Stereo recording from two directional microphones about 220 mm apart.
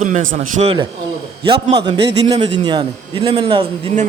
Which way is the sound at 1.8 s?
20° right (ahead or behind).